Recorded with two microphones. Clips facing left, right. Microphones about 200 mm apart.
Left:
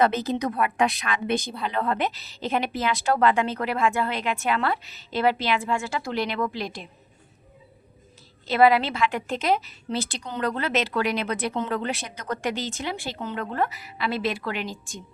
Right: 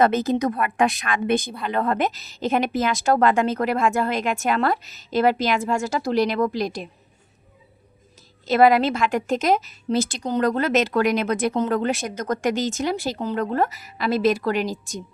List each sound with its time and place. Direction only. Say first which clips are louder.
0.0 s a woman's voice: right 4 dB; 45° right (ahead or behind)
8.4 s a woman's voice: right 3 dB; 45° right (ahead or behind)